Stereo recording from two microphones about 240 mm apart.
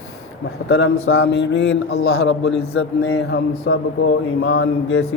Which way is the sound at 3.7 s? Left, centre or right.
Left.